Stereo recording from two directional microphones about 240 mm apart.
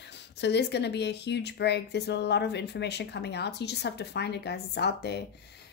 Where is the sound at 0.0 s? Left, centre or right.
Left.